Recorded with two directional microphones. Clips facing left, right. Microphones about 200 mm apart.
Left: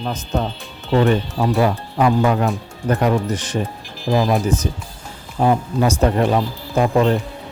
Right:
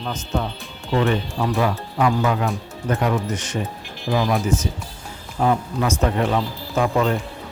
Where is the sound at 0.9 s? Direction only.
35° left (ahead or behind).